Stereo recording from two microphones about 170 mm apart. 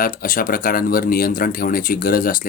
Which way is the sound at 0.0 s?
55° left (ahead or behind).